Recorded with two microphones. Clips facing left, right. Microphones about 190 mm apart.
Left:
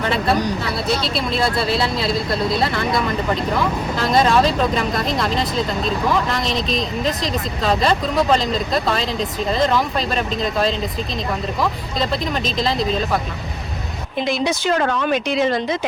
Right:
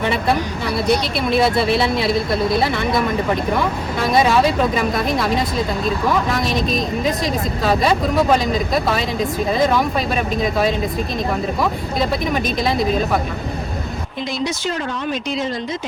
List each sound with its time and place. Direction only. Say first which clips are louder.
0.9 s speech: right 4 dB; 55° right (ahead or behind)
1.4 s speech: right 5 dB; 20° right (ahead or behind)
2.0 s speech: right 2 dB; 55° right (ahead or behind)
4.0 s speech: right 1 dB; 5° right (ahead or behind)
6.5 s a woman's voice: right 2 dB; 50° right (ahead or behind)
7.6 s speech: right 1 dB; 5° right (ahead or behind)
11.6 s speech: even; 5° right (ahead or behind)
14.4 s speech: left 4 dB; 65° left (ahead or behind)